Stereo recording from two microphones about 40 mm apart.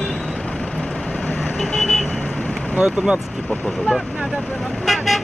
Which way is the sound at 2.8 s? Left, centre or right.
Right.